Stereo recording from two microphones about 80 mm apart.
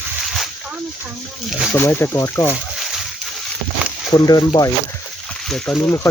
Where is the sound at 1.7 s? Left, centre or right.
Left.